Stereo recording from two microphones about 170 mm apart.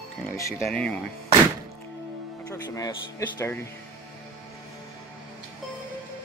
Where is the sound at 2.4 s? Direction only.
20° left (ahead or behind).